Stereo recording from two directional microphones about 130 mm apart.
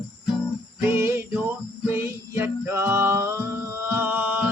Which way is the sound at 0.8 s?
20° right (ahead or behind).